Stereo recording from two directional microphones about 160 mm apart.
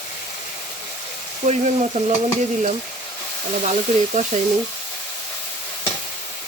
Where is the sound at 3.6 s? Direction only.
50° right (ahead or behind).